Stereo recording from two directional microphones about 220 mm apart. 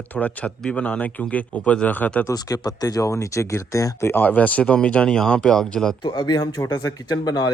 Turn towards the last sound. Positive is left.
turn(degrees=15)  # may be behind; listen again after turning